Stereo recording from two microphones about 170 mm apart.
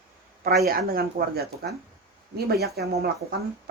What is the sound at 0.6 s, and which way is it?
Speech, 60° right (ahead or behind).